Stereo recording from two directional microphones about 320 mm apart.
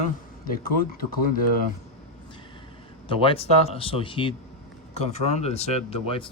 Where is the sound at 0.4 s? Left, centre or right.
Left.